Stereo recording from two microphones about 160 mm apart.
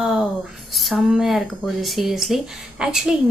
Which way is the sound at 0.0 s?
5° right (ahead or behind).